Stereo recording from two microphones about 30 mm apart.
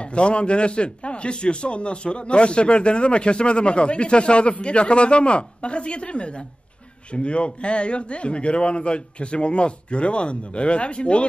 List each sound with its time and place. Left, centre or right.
0.0 s a man's voice: left